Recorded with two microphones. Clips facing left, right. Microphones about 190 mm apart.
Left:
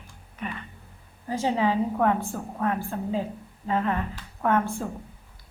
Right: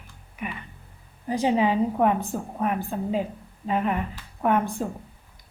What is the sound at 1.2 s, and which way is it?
A woman's voice, 15° right (ahead or behind).